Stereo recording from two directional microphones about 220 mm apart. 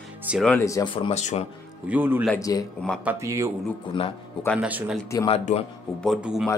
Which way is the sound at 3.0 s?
15° right (ahead or behind).